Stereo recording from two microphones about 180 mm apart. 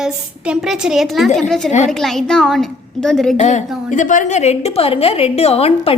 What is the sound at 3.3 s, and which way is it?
A woman's voice, 40° left (ahead or behind).